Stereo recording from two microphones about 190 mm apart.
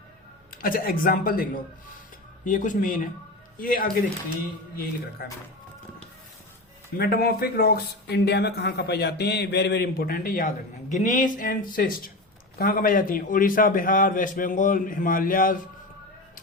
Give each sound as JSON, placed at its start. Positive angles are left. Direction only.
{"t": 0.5, "sound": "speech", "side_deg": 50}
{"t": 5.2, "sound": "speech", "side_deg": 50}
{"t": 6.9, "sound": "speech", "side_deg": 55}